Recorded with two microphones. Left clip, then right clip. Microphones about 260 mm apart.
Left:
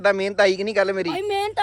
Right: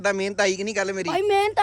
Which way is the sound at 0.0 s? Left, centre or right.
Centre.